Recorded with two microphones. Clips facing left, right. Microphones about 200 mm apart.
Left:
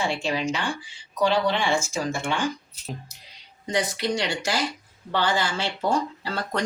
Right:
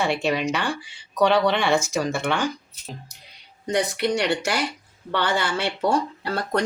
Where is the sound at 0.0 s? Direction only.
65° right (ahead or behind).